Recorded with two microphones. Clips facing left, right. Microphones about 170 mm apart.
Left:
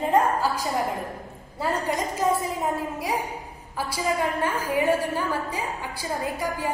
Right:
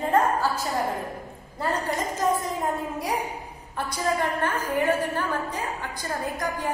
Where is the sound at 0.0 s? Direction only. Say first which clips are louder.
Left 1 dB; 15° left (ahead or behind).